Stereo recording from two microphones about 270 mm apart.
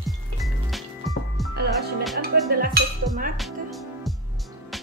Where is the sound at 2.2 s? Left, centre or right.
Right.